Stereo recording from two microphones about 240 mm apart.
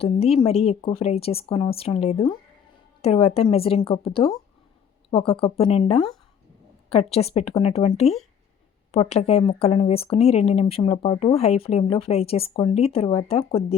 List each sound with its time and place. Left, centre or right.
0.0 s speech: left